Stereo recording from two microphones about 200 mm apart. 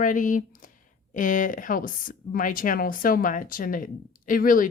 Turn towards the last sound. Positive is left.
turn(degrees=45)  # may be behind; listen again after turning